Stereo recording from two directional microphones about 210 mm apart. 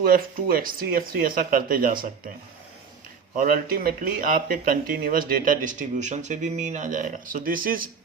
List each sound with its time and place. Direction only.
0.0 s speech: 45° right (ahead or behind)
3.3 s speech: 45° right (ahead or behind)